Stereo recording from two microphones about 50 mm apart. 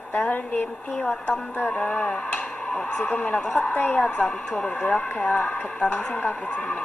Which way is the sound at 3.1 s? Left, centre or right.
Left.